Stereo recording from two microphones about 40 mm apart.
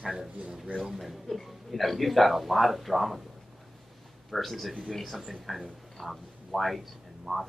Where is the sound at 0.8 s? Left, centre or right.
Centre.